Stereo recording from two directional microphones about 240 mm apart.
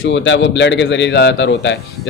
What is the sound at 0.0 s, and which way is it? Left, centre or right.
A man's voice, left.